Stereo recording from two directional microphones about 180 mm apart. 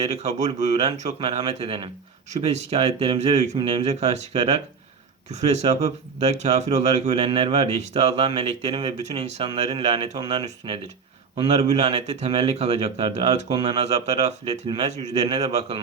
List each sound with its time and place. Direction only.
0.0 s a man's voice: 35° right (ahead or behind)